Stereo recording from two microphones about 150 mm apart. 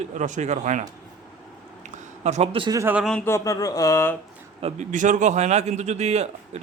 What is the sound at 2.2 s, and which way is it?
Speech, 45° right (ahead or behind).